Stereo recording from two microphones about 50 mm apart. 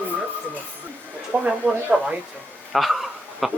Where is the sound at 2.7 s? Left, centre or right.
Centre.